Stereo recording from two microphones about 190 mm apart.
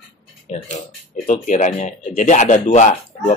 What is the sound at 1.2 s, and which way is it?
Speech, 40° left (ahead or behind).